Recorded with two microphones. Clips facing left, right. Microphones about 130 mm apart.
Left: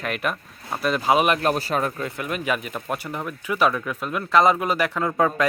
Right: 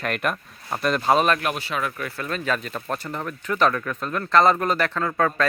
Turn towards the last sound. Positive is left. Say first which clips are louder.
# left 1 dB
turn(degrees=15)  # may be behind; listen again after turning